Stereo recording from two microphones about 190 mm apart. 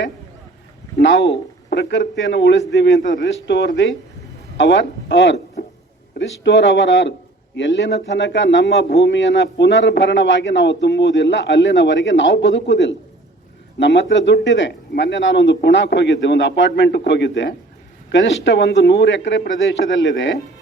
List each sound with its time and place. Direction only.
0.9 s a man's voice: 70° left (ahead or behind)